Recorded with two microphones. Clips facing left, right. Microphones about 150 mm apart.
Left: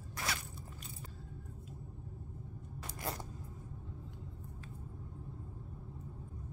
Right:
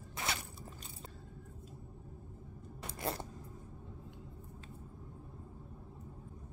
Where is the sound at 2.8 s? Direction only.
25° right (ahead or behind).